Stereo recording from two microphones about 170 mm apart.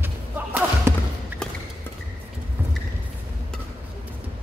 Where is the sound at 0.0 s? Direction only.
15° right (ahead or behind).